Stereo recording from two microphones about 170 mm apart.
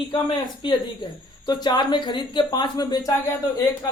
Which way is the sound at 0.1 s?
30° left (ahead or behind).